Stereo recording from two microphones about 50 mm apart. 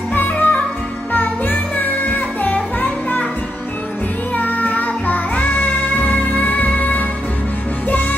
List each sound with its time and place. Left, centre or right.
0.1 s music: left
4.4 s music: left